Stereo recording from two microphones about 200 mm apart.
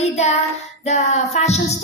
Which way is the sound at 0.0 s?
35° left (ahead or behind).